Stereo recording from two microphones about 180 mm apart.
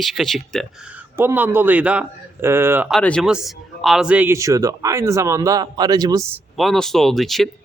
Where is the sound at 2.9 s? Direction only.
5° left (ahead or behind); by 6.4 s 20° right (ahead or behind).